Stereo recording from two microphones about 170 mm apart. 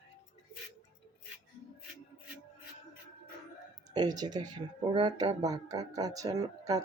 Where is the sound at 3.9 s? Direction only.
25° right (ahead or behind).